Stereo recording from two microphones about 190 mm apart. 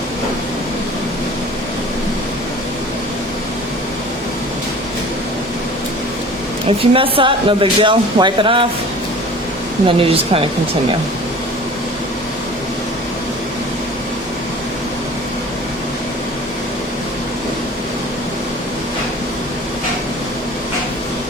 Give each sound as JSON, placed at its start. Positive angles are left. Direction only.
{"t": 6.7, "sound": "speech", "side_deg": -30}
{"t": 9.8, "sound": "speech", "side_deg": -30}